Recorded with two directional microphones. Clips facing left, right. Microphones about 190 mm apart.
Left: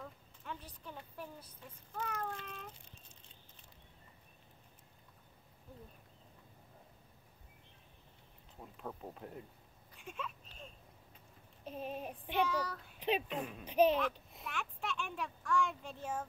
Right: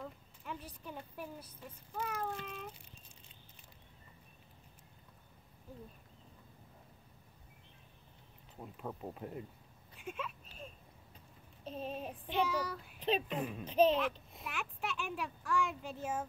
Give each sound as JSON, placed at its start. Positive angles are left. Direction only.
{"t": 0.0, "sound": "a sound", "side_deg": -10}
{"t": 2.0, "sound": "speech", "side_deg": -10}
{"t": 8.5, "sound": "speech", "side_deg": -10}
{"t": 9.9, "sound": "a sound", "side_deg": -5}
{"t": 11.6, "sound": "child singing", "side_deg": 10}
{"t": 12.4, "sound": "a child's voice", "side_deg": -10}
{"t": 13.7, "sound": "child singing", "side_deg": 10}
{"t": 14.3, "sound": "a child's voice", "side_deg": -5}